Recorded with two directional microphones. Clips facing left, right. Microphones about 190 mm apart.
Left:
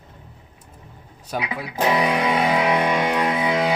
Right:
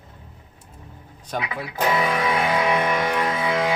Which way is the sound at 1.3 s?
15° left (ahead or behind).